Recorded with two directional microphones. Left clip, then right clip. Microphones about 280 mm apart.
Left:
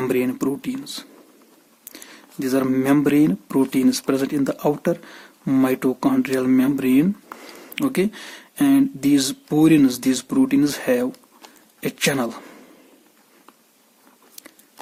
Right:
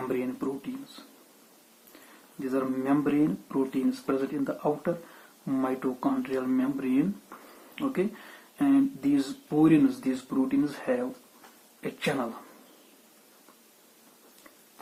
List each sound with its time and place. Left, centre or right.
0.0 s speech: left
2.4 s speech: left